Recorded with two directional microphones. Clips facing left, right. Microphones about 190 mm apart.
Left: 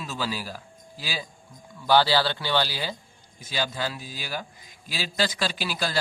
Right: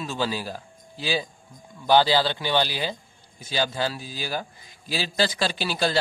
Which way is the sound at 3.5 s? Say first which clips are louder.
Right 3 dB; 30° right (ahead or behind).